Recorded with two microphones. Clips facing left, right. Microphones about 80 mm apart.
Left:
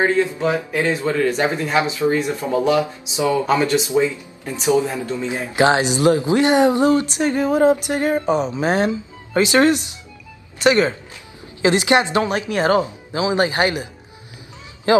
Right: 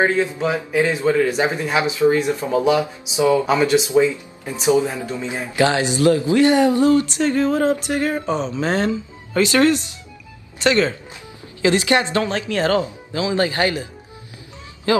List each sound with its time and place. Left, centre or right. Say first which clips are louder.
0.0 s speech: left 1 dB; centre
5.6 s speech: left 1 dB; left
14.9 s a man's voice: left 3 dB; left